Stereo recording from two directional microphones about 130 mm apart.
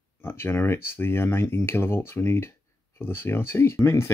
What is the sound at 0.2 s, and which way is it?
Speech, 20° left (ahead or behind).